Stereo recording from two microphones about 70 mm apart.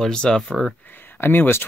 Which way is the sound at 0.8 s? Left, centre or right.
Left.